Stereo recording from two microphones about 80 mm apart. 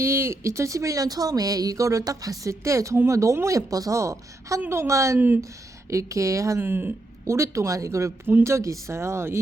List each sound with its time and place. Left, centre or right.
0.0 s speech: right
6.6 s speech: right